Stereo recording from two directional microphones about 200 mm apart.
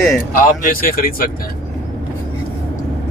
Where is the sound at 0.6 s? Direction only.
45° left (ahead or behind).